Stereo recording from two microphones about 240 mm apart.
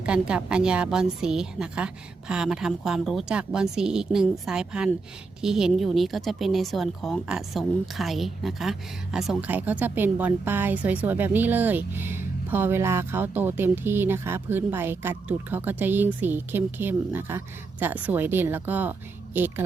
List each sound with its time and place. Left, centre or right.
0.0 s a woman's voice: centre